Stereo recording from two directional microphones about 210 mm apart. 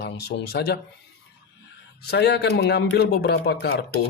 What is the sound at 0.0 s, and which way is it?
Speech, 50° left (ahead or behind).